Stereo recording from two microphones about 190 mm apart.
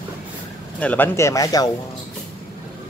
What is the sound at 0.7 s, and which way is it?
Speech, 10° left (ahead or behind).